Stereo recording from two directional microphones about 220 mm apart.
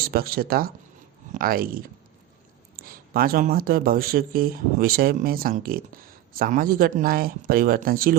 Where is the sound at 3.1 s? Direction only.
40° right (ahead or behind).